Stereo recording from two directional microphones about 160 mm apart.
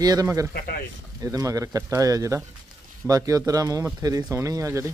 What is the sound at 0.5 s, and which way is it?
Speech, 70° left (ahead or behind).